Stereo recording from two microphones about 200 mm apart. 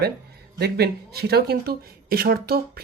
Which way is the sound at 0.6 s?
50° right (ahead or behind).